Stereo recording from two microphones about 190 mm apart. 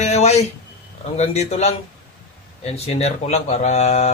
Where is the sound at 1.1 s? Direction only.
35° left (ahead or behind).